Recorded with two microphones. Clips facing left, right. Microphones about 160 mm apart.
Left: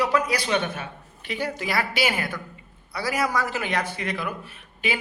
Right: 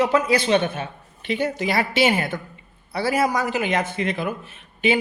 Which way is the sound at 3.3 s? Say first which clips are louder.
Right 4 dB; 15° right (ahead or behind).